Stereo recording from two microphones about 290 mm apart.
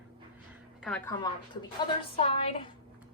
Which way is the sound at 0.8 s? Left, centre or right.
Centre.